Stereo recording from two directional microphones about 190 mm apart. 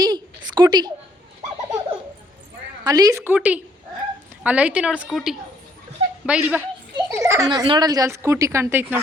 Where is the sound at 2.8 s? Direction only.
20° right (ahead or behind).